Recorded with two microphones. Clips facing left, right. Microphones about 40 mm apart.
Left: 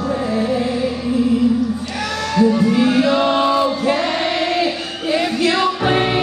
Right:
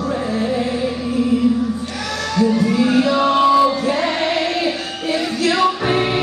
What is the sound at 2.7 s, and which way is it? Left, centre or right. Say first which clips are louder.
Music: left 1 dB; left.